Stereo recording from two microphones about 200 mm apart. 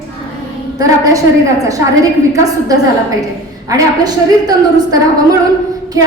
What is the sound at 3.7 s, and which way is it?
A woman's voice, 20° right (ahead or behind).